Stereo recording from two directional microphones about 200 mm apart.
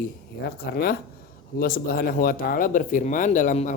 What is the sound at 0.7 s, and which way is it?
Speech, 55° left (ahead or behind).